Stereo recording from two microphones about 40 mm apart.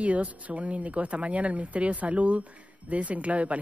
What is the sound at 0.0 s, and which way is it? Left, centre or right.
Speech, right.